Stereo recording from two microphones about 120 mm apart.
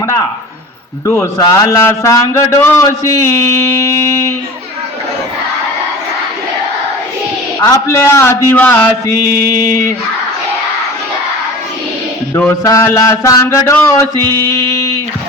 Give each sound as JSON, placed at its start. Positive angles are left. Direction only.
{"t": 1.0, "sound": "a man's voice", "side_deg": 25}
{"t": 7.6, "sound": "a man's voice", "side_deg": 25}
{"t": 12.6, "sound": "a man's voice", "side_deg": 25}